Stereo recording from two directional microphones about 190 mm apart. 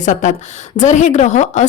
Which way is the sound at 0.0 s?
40° left (ahead or behind).